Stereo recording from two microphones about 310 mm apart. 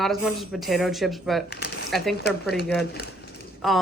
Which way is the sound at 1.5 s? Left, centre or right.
Left.